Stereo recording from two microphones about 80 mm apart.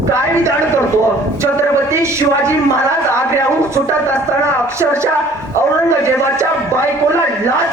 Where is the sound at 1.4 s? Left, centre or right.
Right.